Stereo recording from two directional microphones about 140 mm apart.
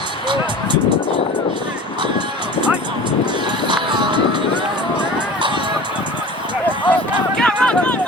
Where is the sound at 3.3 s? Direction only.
35° right (ahead or behind).